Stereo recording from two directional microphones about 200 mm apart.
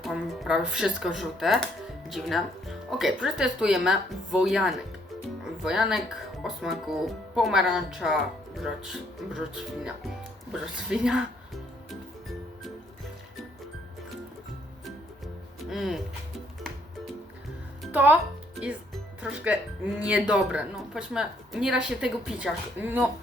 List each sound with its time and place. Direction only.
0.0 s speech: centre (ahead or behind)
10.5 s speech: 5° right (ahead or behind)
15.7 s speech: centre (ahead or behind)
17.9 s speech: 10° right (ahead or behind)
18.6 s music: 5° right (ahead or behind)
20.0 s speech: 5° right (ahead or behind)